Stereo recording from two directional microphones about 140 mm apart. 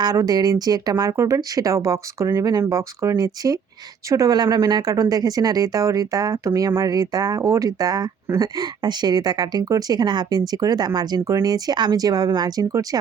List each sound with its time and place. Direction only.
0.0 s speech: 25° right (ahead or behind)